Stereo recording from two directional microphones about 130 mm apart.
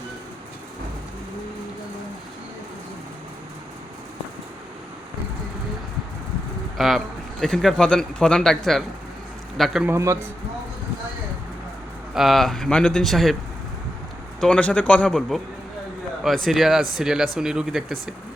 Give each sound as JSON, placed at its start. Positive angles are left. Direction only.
{"t": 6.7, "sound": "a man's voice", "side_deg": 0}
{"t": 9.8, "sound": "a man's voice", "side_deg": -20}
{"t": 12.1, "sound": "a man's voice", "side_deg": 0}
{"t": 14.4, "sound": "a man's voice", "side_deg": 10}